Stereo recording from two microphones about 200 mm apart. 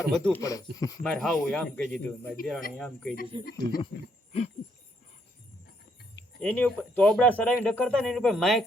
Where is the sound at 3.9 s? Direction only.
65° left (ahead or behind).